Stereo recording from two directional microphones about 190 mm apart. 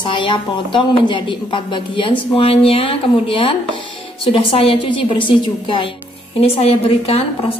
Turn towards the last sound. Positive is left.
turn(degrees=30)  # may be behind; listen again after turning